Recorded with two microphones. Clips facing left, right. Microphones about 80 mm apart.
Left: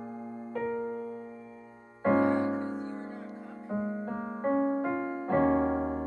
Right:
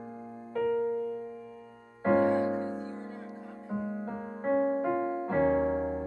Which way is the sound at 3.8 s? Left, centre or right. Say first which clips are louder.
Left 2 dB; left.